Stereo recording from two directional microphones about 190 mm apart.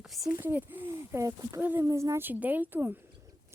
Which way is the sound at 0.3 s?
10° right (ahead or behind).